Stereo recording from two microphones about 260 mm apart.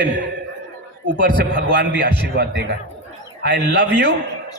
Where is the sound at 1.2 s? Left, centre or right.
Right.